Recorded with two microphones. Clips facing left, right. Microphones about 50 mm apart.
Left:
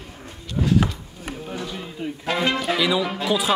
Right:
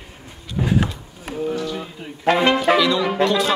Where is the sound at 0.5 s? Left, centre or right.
Right.